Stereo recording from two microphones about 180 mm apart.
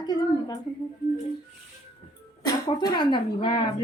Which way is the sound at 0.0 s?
20° left (ahead or behind).